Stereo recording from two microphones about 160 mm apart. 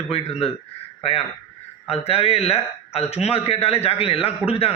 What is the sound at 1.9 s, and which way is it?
Speech, 40° left (ahead or behind).